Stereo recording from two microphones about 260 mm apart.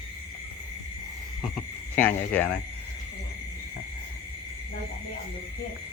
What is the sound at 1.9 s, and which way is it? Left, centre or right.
Speech, centre.